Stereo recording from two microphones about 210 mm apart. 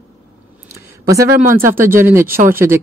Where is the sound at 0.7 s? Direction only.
15° right (ahead or behind).